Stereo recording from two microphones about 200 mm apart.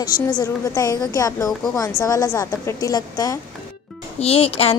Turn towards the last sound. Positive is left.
turn(degrees=30)  # may be behind; listen again after turning